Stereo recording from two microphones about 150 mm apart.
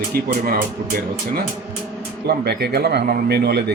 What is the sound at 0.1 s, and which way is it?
Speech, 85° right.